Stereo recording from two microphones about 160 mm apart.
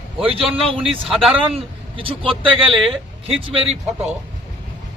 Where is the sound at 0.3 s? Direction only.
35° right (ahead or behind).